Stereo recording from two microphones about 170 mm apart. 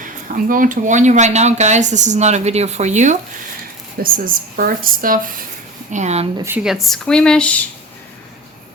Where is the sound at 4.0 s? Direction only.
60° right (ahead or behind).